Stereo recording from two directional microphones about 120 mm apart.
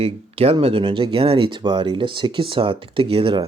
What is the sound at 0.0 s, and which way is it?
Speech, 55° right (ahead or behind).